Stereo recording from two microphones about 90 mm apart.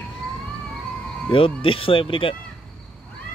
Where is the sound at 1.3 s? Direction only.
85° left.